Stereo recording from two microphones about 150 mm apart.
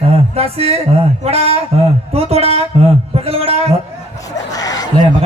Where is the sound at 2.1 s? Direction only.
40° right (ahead or behind).